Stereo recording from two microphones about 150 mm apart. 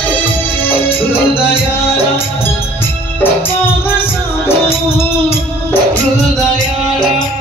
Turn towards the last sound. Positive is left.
turn(degrees=15)  # may be behind; listen again after turning